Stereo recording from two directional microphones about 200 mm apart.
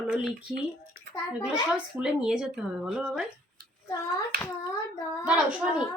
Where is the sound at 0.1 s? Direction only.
5° right (ahead or behind).